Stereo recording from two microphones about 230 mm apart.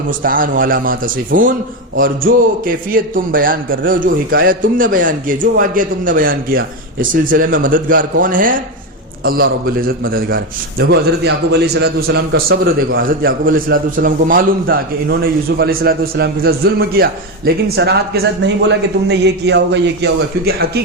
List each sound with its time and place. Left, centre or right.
0.2 s a man's voice: right